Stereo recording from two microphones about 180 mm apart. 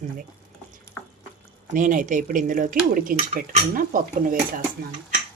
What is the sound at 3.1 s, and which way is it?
Speech, 40° right (ahead or behind).